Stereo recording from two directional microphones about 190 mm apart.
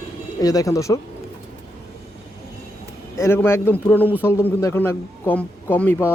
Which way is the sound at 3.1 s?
15° left (ahead or behind).